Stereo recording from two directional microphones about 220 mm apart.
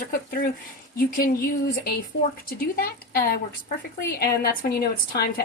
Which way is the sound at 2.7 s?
40° left (ahead or behind).